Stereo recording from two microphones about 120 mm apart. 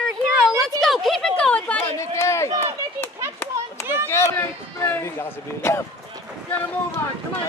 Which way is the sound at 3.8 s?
20° right (ahead or behind).